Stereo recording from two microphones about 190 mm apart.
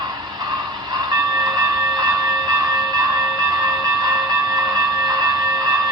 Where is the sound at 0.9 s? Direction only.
20° right (ahead or behind).